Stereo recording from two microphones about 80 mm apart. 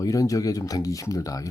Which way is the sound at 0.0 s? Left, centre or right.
Left.